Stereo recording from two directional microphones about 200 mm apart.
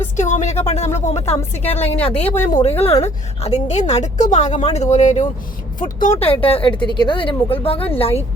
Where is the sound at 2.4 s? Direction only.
35° left (ahead or behind).